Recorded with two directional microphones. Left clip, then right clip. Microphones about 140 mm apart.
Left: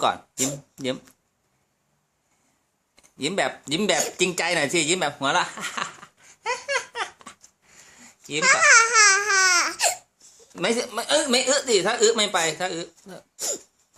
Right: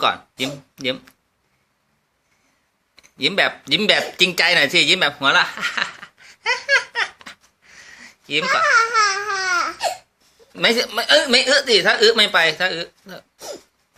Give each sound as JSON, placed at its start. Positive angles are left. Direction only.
{"t": 0.0, "sound": "speech", "side_deg": 30}
{"t": 2.9, "sound": "a sound", "side_deg": 25}
{"t": 10.6, "sound": "speech", "side_deg": 20}